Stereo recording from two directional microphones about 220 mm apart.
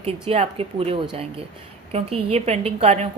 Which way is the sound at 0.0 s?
25° right (ahead or behind).